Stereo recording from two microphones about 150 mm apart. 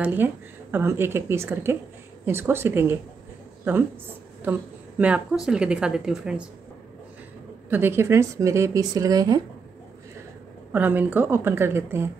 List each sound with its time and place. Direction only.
0.0 s a woman's voice: 15° right (ahead or behind)
7.7 s speech: 15° right (ahead or behind)
10.7 s a woman's voice: 10° right (ahead or behind)